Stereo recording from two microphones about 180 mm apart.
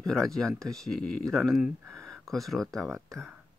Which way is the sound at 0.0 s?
Centre (ahead or behind).